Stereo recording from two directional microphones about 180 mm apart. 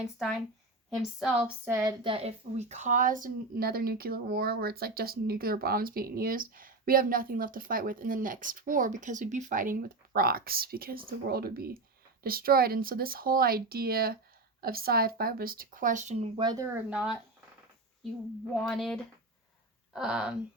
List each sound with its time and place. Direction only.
0.0 s speech: centre (ahead or behind)
1.7 s a woman's voice: 15° right (ahead or behind)
2.0 s speech: 35° right (ahead or behind)
16.4 s speech: 25° right (ahead or behind)
16.9 s speech: 5° right (ahead or behind)
18.6 s speech: centre (ahead or behind)